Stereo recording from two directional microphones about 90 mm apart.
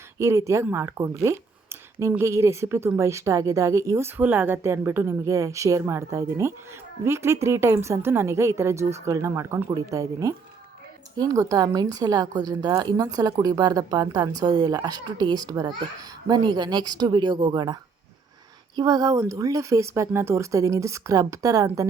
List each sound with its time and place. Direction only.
0.2 s a woman's voice: 30° right (ahead or behind)
4.2 s a woman's voice: 20° right (ahead or behind); by 17.7 s 55° right (ahead or behind)
18.8 s a woman's voice: 45° right (ahead or behind)